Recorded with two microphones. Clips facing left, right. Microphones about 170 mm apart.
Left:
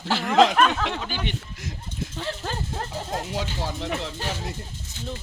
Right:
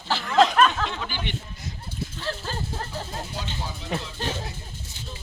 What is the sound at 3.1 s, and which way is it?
Speech, 90° left.